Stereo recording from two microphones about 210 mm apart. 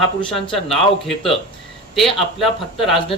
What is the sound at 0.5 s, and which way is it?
Speech, centre (ahead or behind).